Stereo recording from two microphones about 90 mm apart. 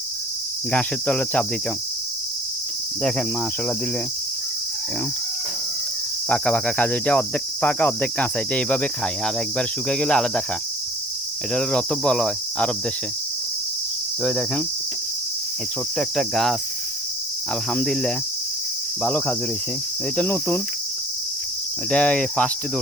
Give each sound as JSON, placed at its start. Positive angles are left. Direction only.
{"t": 0.7, "sound": "cricket", "side_deg": 15}
{"t": 6.2, "sound": "cricket", "side_deg": 10}
{"t": 11.5, "sound": "cricket", "side_deg": 10}
{"t": 14.2, "sound": "cricket", "side_deg": 5}
{"t": 16.0, "sound": "cricket", "side_deg": 0}
{"t": 17.7, "sound": "cricket", "side_deg": 10}
{"t": 20.2, "sound": "cricket", "side_deg": 25}
{"t": 21.8, "sound": "cricket", "side_deg": 10}